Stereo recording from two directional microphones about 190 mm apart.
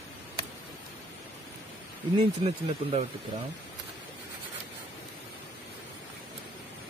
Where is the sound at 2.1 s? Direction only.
30° right (ahead or behind).